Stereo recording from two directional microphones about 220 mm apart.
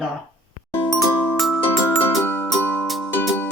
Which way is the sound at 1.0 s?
Centre (ahead or behind).